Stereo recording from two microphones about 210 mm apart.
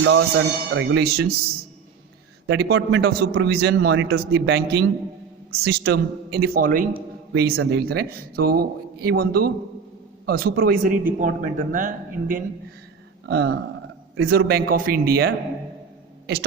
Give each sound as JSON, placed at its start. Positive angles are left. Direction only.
{"t": 0.0, "sound": "speech", "side_deg": -65}
{"t": 2.5, "sound": "a man's voice", "side_deg": -50}
{"t": 7.5, "sound": "a man's voice", "side_deg": -60}
{"t": 13.2, "sound": "speech", "side_deg": -50}